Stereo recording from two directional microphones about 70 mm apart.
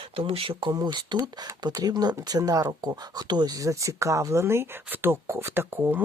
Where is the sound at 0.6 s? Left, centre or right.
Right.